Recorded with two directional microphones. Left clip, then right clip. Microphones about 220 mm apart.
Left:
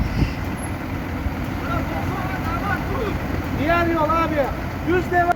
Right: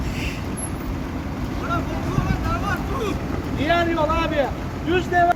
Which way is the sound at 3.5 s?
45° left (ahead or behind).